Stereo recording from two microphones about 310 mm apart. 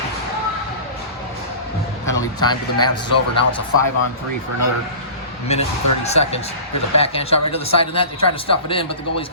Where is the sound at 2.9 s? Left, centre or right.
Left.